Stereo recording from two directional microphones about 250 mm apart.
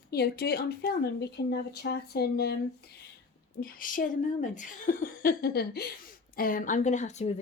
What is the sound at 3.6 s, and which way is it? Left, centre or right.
Speech, left.